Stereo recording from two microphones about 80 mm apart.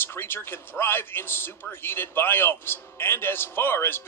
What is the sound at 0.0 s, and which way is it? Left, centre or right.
A man's voice, left.